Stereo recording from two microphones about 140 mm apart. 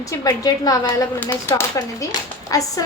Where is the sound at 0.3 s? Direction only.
25° left (ahead or behind).